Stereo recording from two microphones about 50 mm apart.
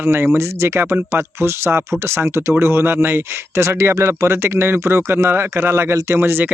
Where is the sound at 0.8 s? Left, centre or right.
Right.